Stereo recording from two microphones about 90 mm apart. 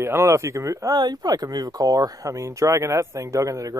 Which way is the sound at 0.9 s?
50° right (ahead or behind).